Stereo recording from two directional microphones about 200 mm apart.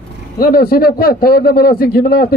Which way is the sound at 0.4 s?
50° left (ahead or behind).